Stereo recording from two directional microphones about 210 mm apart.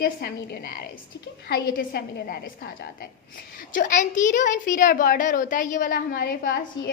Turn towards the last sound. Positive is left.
turn(degrees=45)  # may be behind; listen again after turning